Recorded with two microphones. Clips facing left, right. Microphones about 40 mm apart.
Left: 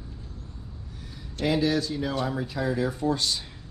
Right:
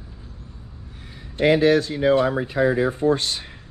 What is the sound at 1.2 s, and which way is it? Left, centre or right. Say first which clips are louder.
Speech: right 8 dB; right.